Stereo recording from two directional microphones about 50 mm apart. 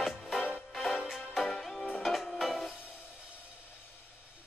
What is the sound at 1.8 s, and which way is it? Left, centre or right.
Music, left.